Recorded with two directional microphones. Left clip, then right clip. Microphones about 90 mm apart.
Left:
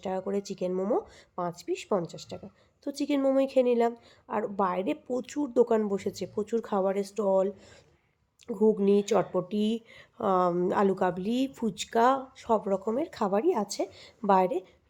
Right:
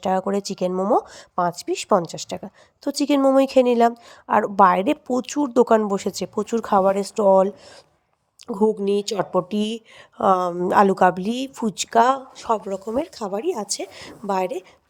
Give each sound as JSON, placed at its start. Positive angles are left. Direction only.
{"t": 0.0, "sound": "speech", "side_deg": -45}
{"t": 0.7, "sound": "speech", "side_deg": -20}
{"t": 0.9, "sound": "speech", "side_deg": -45}
{"t": 2.8, "sound": "speech", "side_deg": -40}
{"t": 5.0, "sound": "speech", "side_deg": -30}
{"t": 6.7, "sound": "speech", "side_deg": -45}
{"t": 8.5, "sound": "speech", "side_deg": -50}
{"t": 13.0, "sound": "a woman's voice", "side_deg": -65}